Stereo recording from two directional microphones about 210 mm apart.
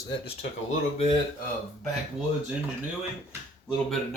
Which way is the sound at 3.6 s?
Centre (ahead or behind).